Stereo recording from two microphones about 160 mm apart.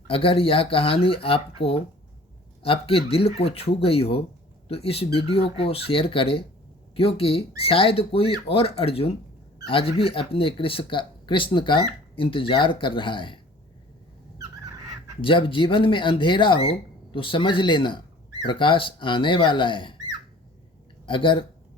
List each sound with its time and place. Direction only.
0.1 s speech: 35° left (ahead or behind)
14.3 s a sound: 20° right (ahead or behind)
15.2 s speech: 30° left (ahead or behind)
21.1 s speech: 30° left (ahead or behind)